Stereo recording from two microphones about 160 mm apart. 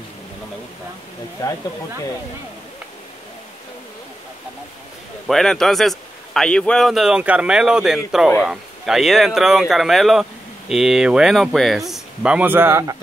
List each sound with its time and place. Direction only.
1.4 s speech: 20° left (ahead or behind)
5.2 s a man's voice: centre (ahead or behind); by 12.9 s 15° right (ahead or behind)